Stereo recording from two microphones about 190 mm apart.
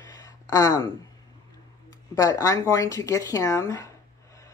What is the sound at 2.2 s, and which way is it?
Speech, 15° left (ahead or behind).